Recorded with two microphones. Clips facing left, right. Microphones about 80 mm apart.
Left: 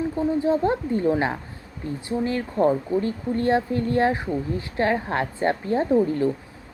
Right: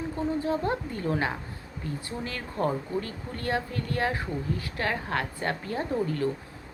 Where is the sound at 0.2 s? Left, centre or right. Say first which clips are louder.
Left 6 dB; left.